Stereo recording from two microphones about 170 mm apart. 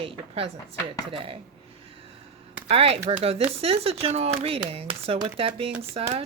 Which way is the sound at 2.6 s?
35° right (ahead or behind).